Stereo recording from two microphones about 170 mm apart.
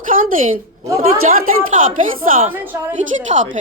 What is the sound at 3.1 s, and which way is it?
Speech, 40° right (ahead or behind).